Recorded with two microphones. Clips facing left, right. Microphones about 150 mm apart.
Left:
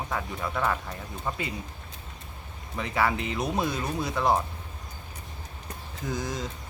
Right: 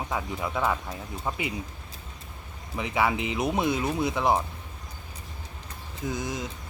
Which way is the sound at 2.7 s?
15° right (ahead or behind).